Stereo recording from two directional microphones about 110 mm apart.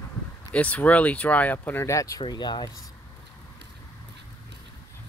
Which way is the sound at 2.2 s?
45° left (ahead or behind).